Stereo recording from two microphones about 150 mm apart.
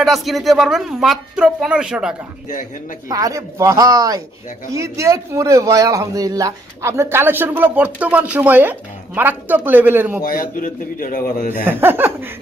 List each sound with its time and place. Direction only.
0.0 s speech: centre (ahead or behind)
3.1 s a man's voice: 25° right (ahead or behind)
10.2 s a man's voice: 70° left (ahead or behind)
11.6 s a man's voice: 15° right (ahead or behind)